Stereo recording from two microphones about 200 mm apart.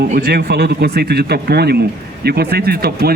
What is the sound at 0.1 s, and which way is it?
Speech, 50° right (ahead or behind).